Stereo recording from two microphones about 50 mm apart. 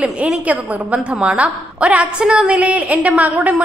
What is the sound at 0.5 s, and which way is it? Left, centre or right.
A woman's voice, right.